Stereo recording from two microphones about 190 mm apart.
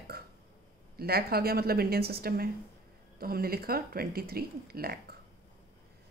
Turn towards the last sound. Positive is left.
turn(degrees=-55)  # may be behind; listen again after turning